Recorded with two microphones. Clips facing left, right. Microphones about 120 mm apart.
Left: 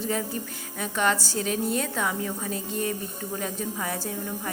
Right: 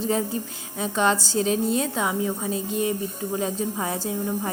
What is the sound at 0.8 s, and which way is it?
A woman's voice, 25° right (ahead or behind).